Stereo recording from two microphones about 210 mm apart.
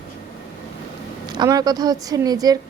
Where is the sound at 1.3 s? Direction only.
20° right (ahead or behind).